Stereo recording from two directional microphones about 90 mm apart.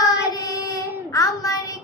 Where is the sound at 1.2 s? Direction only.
40° left (ahead or behind).